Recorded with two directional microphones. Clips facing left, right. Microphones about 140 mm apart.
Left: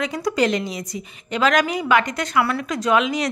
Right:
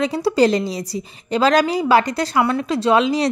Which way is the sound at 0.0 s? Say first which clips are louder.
Right 5 dB; 30° right (ahead or behind).